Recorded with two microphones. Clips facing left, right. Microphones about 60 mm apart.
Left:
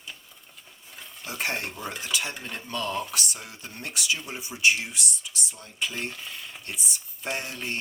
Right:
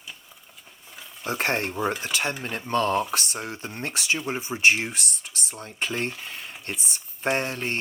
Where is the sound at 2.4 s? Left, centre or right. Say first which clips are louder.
Right 7 dB; right.